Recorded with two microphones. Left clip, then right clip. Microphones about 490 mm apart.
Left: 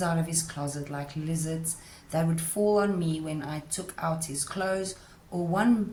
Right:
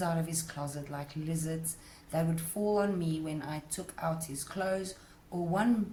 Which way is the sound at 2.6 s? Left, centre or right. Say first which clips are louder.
Left 5 dB; right.